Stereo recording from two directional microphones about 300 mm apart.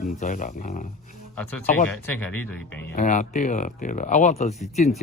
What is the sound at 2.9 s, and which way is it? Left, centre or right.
Speech, left.